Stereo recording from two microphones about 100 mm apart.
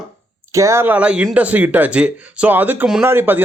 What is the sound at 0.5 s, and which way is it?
Speech, 30° right (ahead or behind).